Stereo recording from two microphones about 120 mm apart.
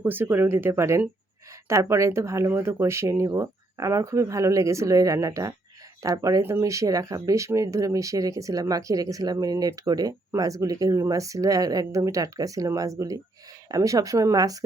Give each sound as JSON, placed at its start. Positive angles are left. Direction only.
{"t": 0.0, "sound": "speech", "side_deg": -15}